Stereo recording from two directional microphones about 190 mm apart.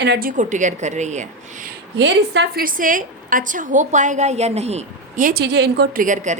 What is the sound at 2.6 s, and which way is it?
A woman's voice, 45° right (ahead or behind).